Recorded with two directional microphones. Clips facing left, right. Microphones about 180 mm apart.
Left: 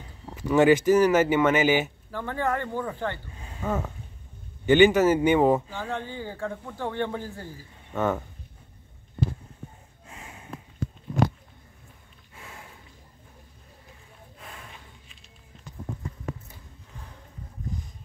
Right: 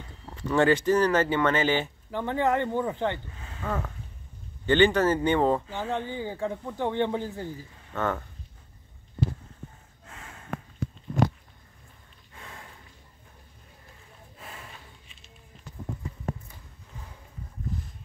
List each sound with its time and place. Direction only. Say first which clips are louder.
0.3 s speech: left 3 dB; 10° left (ahead or behind)
2.0 s speech: right 3 dB; 20° right (ahead or behind)
3.3 s a sound: left 3 dB; 15° left (ahead or behind)
4.6 s speech: left 3 dB; 10° left (ahead or behind)
5.7 s speech: right 2 dB; 15° right (ahead or behind)
7.9 s speech: left 3 dB; 10° left (ahead or behind)
10.0 s snort: left 1 dB; 15° left (ahead or behind)
12.4 s a sound: even; 5° left (ahead or behind)
14.4 s snort: right 1 dB; 5° right (ahead or behind)